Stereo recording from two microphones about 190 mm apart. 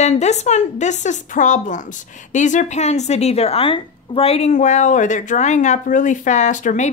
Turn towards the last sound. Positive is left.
turn(degrees=40)  # may be behind; listen again after turning